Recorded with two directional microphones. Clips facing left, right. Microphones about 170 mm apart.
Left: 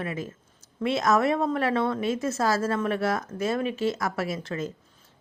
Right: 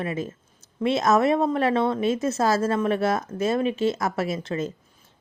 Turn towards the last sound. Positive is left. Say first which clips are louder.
# right 3 dB
turn(degrees=-20)  # may be behind; listen again after turning